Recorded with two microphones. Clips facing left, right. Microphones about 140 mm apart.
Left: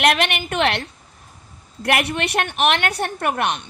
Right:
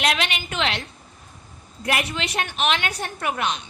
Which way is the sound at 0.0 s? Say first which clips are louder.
Left 5 dB; 55° left (ahead or behind).